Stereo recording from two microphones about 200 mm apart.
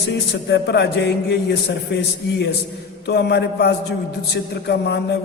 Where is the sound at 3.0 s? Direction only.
55° left (ahead or behind).